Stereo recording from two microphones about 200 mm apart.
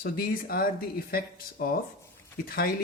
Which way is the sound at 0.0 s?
45° left (ahead or behind).